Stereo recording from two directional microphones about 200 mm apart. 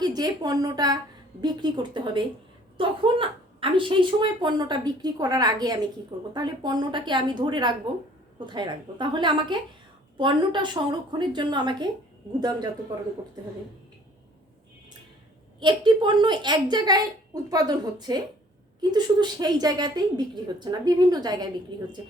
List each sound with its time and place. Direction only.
0.0 s a woman's voice: 20° right (ahead or behind)
15.6 s a woman's voice: 25° right (ahead or behind)